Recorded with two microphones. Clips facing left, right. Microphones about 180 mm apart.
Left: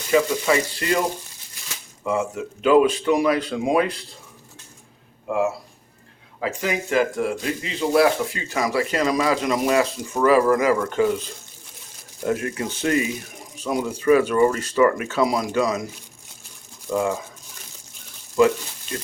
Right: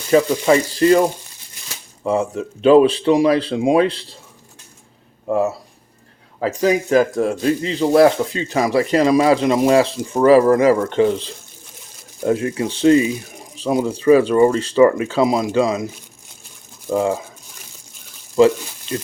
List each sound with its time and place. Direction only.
0.1 s speech: 35° right (ahead or behind)
2.0 s speech: 30° right (ahead or behind)
5.3 s speech: 35° right (ahead or behind)
16.9 s speech: 25° right (ahead or behind)
18.3 s frying: 25° right (ahead or behind)